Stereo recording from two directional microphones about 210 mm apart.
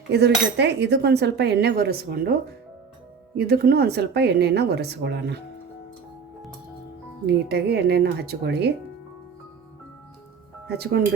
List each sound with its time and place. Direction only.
0.1 s cutlery: 55° right (ahead or behind)
3.3 s cutlery: 50° right (ahead or behind)
7.4 s cutlery: 50° right (ahead or behind)
10.7 s cutlery: 50° right (ahead or behind)